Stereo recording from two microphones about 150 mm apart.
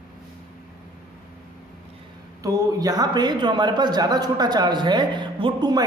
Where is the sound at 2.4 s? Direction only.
25° right (ahead or behind).